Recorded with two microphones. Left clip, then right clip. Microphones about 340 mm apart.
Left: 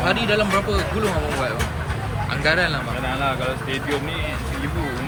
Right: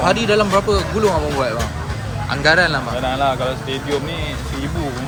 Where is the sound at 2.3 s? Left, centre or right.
Centre.